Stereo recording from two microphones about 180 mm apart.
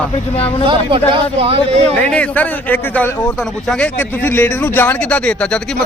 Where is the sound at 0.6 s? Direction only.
30° right (ahead or behind).